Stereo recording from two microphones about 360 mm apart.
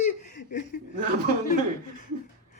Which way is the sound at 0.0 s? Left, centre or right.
Left.